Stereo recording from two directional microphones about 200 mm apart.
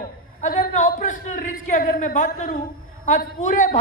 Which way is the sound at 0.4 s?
40° left (ahead or behind).